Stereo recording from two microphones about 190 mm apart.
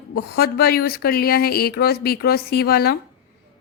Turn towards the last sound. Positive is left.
turn(degrees=55)  # may be behind; listen again after turning